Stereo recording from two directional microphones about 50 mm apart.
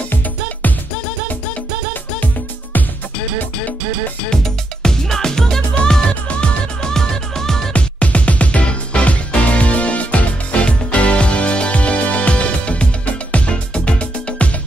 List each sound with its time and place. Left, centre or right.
0.1 s music: left
4.3 s music: centre
7.7 s music: left